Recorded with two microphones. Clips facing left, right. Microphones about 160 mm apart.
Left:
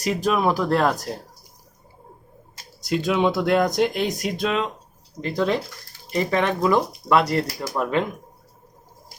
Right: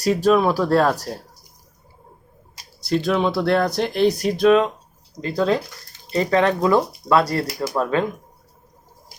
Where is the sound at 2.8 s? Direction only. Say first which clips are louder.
Right 1 dB; 15° left (ahead or behind).